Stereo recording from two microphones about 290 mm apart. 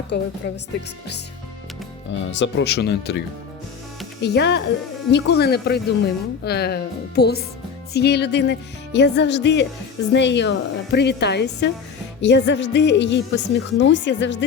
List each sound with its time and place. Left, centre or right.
0.1 s a woman's voice: left
2.3 s a woman's voice: left